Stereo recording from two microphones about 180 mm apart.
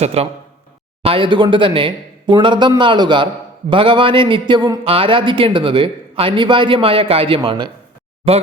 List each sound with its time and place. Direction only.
0.0 s a man's voice: 35° right (ahead or behind)